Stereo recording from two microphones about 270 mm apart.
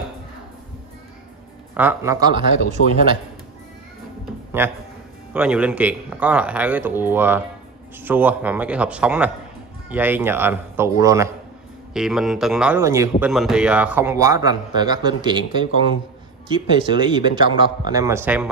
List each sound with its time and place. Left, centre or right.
1.8 s speech: centre
2.8 s a man's voice: left
5.3 s speech: centre